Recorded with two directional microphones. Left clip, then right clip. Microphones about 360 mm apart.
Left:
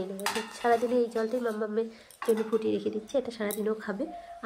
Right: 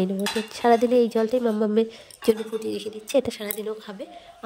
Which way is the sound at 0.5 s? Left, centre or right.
Right.